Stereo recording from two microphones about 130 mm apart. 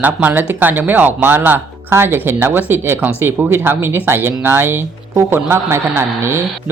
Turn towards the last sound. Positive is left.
turn(degrees=-20)  # may be behind; listen again after turning